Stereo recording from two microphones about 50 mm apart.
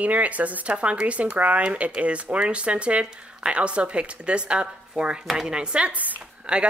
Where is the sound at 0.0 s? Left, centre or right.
Right.